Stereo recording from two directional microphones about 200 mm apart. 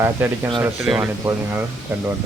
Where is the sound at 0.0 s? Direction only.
10° right (ahead or behind).